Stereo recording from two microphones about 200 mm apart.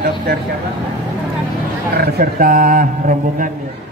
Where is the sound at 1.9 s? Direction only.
50° right (ahead or behind).